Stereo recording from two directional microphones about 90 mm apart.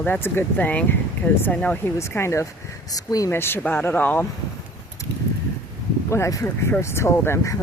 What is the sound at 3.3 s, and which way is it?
Speech, 25° left (ahead or behind).